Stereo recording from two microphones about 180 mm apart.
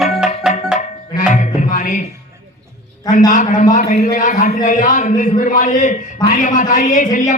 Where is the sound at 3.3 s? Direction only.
45° left (ahead or behind).